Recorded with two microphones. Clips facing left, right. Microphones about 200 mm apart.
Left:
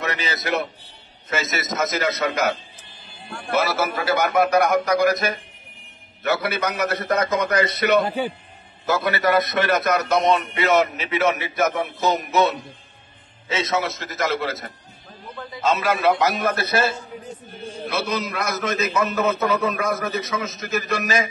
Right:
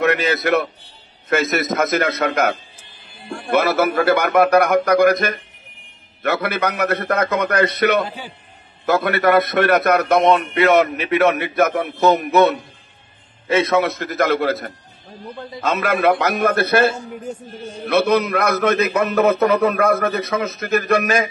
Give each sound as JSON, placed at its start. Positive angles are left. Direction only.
{"t": 0.0, "sound": "a man's voice", "side_deg": -55}